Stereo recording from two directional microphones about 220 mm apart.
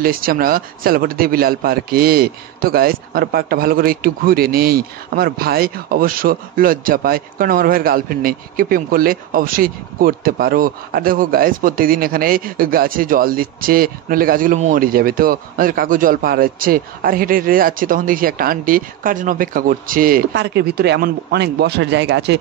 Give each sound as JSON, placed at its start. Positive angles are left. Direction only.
{"t": 0.0, "sound": "a man's voice", "side_deg": -40}